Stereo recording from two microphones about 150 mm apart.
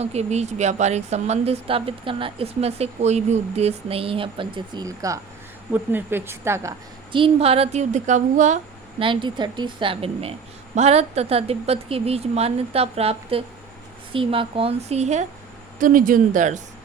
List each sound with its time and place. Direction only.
0.0 s a woman's voice: 45° right (ahead or behind); by 6.7 s 20° right (ahead or behind)
7.1 s speech: 40° right (ahead or behind); by 8.5 s 55° right (ahead or behind)
9.0 s a woman's voice: 35° right (ahead or behind); by 15.3 s 50° right (ahead or behind)
15.8 s speech: 65° right (ahead or behind)